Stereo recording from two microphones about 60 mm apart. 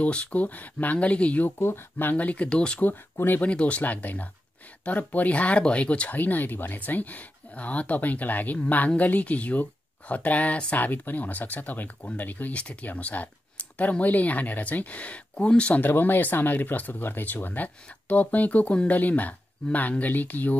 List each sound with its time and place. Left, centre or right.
0.0 s speech: left
1.6 s speech: left
2.1 s speech: left
2.8 s speech: left
3.4 s speech: left
15.8 s speech: left